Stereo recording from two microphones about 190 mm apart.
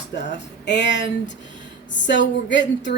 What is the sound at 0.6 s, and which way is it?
Speech, 65° left (ahead or behind).